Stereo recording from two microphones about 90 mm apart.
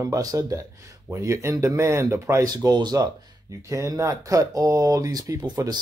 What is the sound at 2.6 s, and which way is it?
Speech, 45° right (ahead or behind).